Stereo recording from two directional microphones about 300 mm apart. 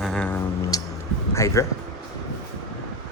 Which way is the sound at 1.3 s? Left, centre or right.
Centre.